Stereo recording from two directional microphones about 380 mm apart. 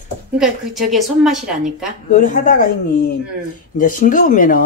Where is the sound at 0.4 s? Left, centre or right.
Centre.